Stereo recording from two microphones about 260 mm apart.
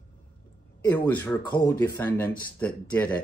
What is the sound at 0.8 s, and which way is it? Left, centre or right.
Speech, centre.